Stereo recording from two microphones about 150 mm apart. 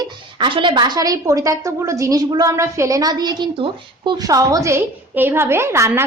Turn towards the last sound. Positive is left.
turn(degrees=-20)  # may be behind; listen again after turning